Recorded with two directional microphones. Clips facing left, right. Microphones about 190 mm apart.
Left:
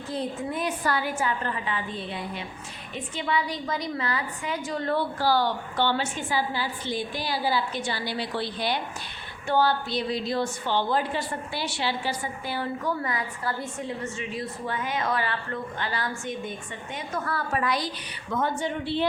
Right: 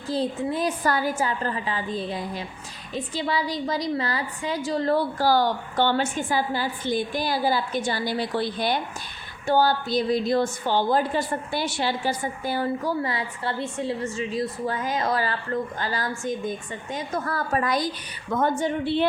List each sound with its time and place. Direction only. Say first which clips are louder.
0.1 s a woman's voice: right 5 dB; 35° right (ahead or behind)
13.0 s a woman's voice: right 3 dB; 30° right (ahead or behind); by 19.0 s 50° right (ahead or behind)